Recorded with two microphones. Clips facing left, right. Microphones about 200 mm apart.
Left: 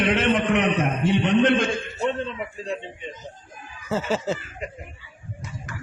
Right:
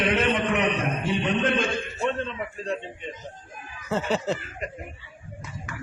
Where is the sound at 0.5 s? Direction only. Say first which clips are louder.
Left 3 dB; 70° left (ahead or behind).